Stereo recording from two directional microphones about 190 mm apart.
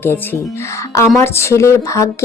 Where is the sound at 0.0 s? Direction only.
10° left (ahead or behind).